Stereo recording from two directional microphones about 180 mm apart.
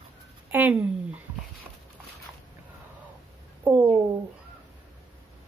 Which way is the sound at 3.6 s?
10° right (ahead or behind).